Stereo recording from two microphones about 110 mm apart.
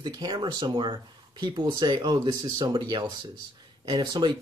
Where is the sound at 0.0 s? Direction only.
40° right (ahead or behind).